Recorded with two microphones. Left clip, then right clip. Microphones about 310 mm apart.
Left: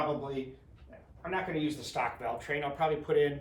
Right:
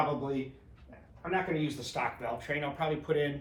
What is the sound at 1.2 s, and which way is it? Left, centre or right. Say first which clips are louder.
Speech: right 1 dB; centre.